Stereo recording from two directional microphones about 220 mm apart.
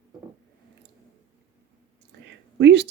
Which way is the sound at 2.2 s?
50° right (ahead or behind).